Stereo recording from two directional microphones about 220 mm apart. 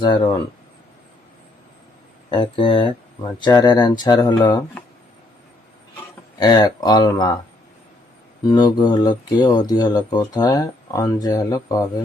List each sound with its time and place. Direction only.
0.0 s speech: 20° left (ahead or behind)
2.3 s speech: 20° left (ahead or behind)
6.4 s speech: 20° left (ahead or behind)
8.4 s speech: 20° left (ahead or behind)